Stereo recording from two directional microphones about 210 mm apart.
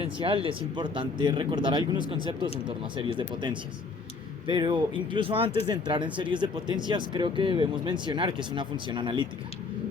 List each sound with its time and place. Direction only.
0.0 s speech: 25° right (ahead or behind)